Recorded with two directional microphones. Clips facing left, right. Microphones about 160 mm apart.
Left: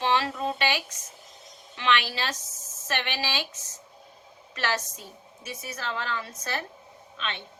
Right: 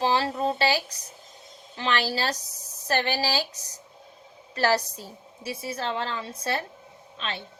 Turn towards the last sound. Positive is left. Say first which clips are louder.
# right 1 dB
turn(degrees=-35)  # may be behind; listen again after turning